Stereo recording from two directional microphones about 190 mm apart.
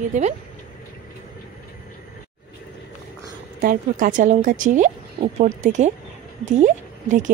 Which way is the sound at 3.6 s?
45° right (ahead or behind).